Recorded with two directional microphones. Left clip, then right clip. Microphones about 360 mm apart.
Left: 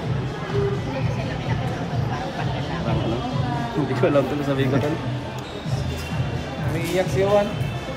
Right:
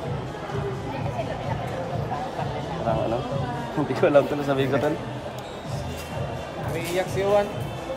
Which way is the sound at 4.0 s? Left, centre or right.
Right.